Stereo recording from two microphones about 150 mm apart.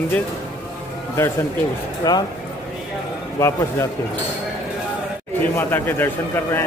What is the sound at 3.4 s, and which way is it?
Speech, 20° left (ahead or behind).